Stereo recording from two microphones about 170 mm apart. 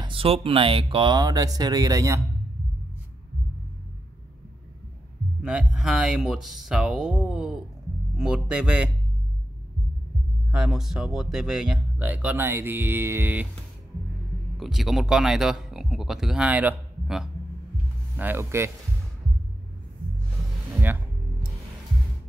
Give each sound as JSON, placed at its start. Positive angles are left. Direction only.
{"t": 0.0, "sound": "speech", "side_deg": -30}
{"t": 5.4, "sound": "speech", "side_deg": -5}
{"t": 10.5, "sound": "speech", "side_deg": -5}
{"t": 14.6, "sound": "speech", "side_deg": 0}